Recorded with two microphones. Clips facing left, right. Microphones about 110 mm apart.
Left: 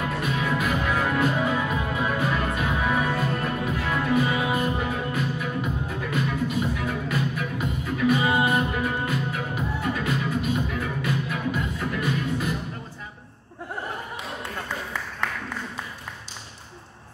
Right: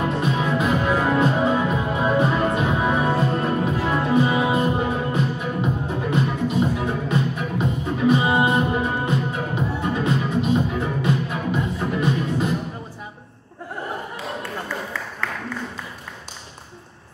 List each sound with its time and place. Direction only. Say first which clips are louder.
0.0 s music: right 5 dB; 25° right (ahead or behind)